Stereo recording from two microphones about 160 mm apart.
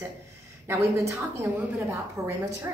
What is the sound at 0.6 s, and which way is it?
A woman's voice, 15° right (ahead or behind).